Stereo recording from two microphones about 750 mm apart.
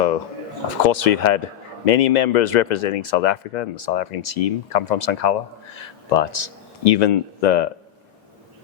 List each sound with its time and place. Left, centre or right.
0.9 s speech: left